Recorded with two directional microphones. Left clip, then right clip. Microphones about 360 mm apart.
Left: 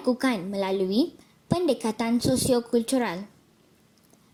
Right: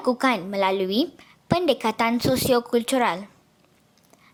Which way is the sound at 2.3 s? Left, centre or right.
Right.